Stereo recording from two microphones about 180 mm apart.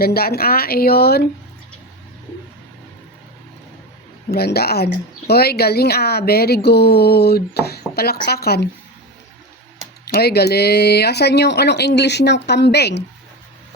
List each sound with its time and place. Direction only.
0.0 s speech: 60° left (ahead or behind)
4.3 s speech: 60° left (ahead or behind)
10.2 s speech: 65° left (ahead or behind)